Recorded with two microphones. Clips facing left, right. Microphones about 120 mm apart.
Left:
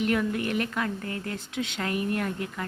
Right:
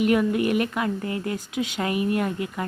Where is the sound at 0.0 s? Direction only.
10° right (ahead or behind).